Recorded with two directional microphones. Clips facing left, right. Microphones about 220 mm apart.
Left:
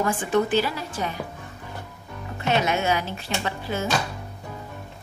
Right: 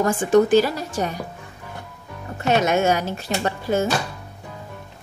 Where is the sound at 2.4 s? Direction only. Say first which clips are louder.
Right 5 dB; 45° right (ahead or behind).